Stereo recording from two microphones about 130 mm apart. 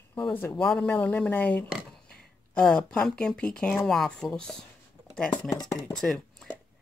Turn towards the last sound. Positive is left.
turn(degrees=5)  # may be behind; listen again after turning